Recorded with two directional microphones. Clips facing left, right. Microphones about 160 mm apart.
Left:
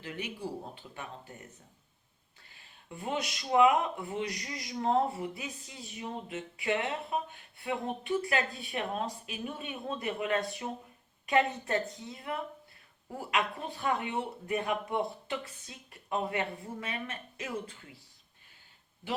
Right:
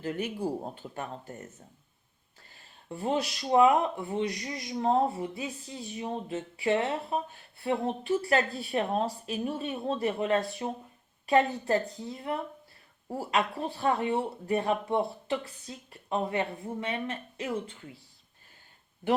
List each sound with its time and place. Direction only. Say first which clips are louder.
0.0 s speech: right 7 dB; 45° right (ahead or behind)
2.5 s speech: right 6 dB; 35° right (ahead or behind)